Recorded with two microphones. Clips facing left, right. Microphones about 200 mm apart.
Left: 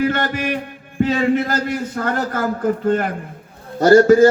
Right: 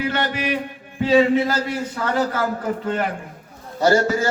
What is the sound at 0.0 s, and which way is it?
A man's voice, 50° left (ahead or behind).